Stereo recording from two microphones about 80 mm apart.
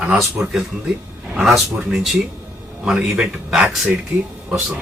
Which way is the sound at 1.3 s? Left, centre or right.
Centre.